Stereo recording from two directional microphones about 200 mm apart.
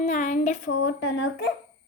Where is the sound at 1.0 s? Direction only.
70° left (ahead or behind).